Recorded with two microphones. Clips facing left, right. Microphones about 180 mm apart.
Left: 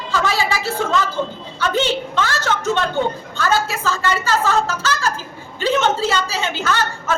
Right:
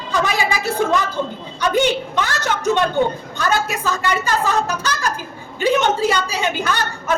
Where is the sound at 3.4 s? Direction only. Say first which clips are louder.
Left 1 dB; 15° right (ahead or behind).